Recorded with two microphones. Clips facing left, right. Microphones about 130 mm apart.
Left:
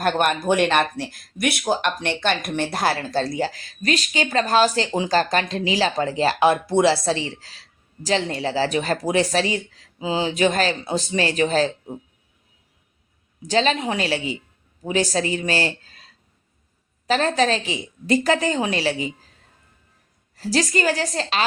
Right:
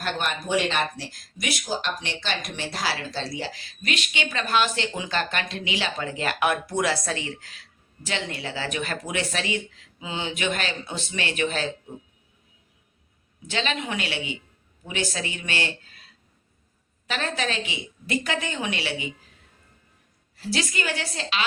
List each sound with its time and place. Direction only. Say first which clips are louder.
0.0 s speech: left 8 dB; 55° left (ahead or behind); by 11.9 s 35° left (ahead or behind)
13.5 s speech: left 8 dB; 35° left (ahead or behind)
17.1 s speech: left 9 dB; 35° left (ahead or behind)
20.3 s speech: left 7 dB; 40° left (ahead or behind)